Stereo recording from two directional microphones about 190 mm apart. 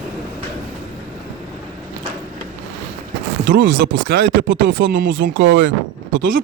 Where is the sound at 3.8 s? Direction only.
50° right (ahead or behind).